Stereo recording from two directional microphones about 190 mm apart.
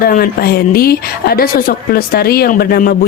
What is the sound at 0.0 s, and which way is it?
A woman's voice, 50° left (ahead or behind).